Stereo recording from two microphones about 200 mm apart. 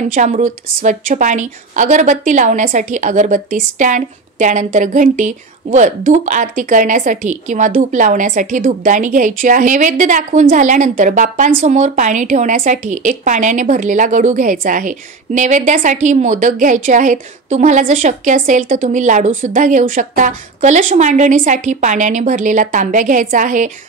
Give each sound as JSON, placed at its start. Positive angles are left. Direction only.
{"t": 0.1, "sound": "a woman's voice", "side_deg": -40}